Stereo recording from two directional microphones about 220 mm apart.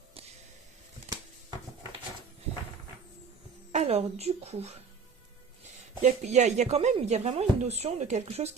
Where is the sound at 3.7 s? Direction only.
30° right (ahead or behind).